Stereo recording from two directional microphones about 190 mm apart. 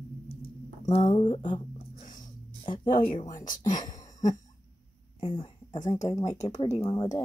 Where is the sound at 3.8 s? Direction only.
20° left (ahead or behind).